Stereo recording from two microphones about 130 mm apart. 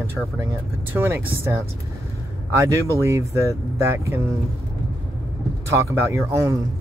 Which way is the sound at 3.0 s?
20° right (ahead or behind).